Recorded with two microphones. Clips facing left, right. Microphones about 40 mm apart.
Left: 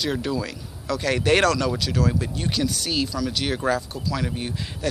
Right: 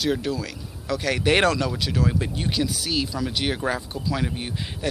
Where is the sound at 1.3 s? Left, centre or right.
Centre.